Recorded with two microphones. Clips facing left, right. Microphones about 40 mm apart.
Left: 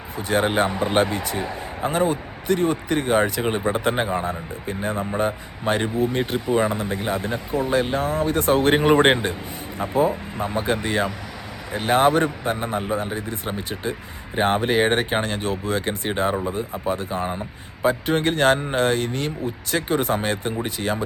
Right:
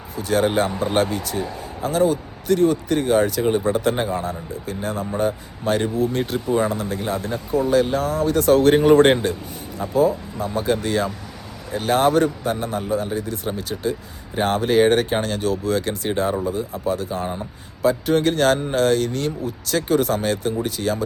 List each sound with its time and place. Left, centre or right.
0.2 s a man's voice: left
7.7 s a man's voice: left